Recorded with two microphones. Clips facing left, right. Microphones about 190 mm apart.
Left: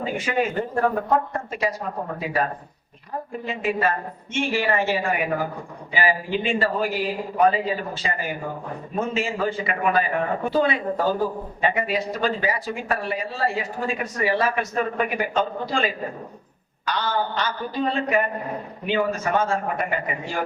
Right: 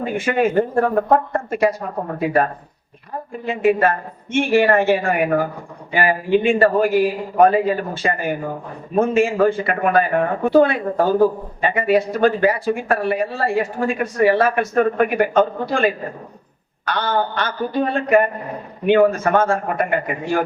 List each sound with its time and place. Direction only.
0.0 s speech: 55° right (ahead or behind)